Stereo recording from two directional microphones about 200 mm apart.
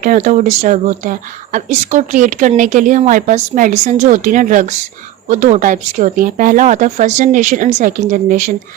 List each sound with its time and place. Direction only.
0.0 s speech: 40° right (ahead or behind)